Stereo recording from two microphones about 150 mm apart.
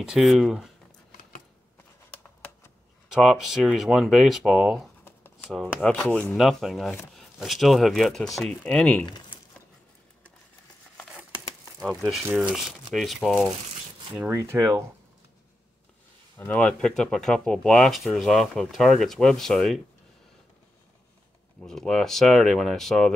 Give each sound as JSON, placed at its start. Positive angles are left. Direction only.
{"t": 0.0, "sound": "speech", "side_deg": 0}
{"t": 3.1, "sound": "speech", "side_deg": 0}
{"t": 5.0, "sound": "shuffling cards", "side_deg": 15}
{"t": 5.5, "sound": "speech", "side_deg": 0}
{"t": 9.0, "sound": "speech", "side_deg": 30}
{"t": 11.8, "sound": "speech", "side_deg": 0}
{"t": 14.1, "sound": "speech", "side_deg": -15}
{"t": 16.3, "sound": "speech", "side_deg": 10}
{"t": 21.6, "sound": "speech", "side_deg": 5}